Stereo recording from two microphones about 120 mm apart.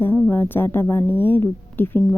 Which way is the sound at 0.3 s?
15° left (ahead or behind).